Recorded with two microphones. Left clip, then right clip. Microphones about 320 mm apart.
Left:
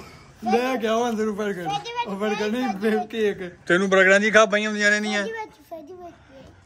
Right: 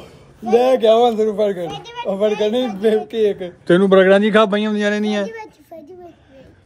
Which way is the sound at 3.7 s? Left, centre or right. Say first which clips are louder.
Right 5 dB; centre.